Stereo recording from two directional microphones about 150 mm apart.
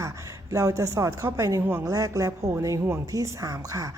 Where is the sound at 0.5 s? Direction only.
20° right (ahead or behind).